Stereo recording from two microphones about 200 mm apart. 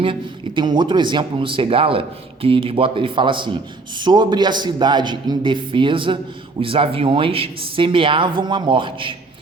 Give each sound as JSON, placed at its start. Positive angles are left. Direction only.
{"t": 0.0, "sound": "speech", "side_deg": -25}